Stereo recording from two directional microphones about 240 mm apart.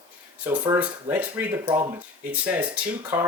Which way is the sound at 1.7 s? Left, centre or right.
Centre.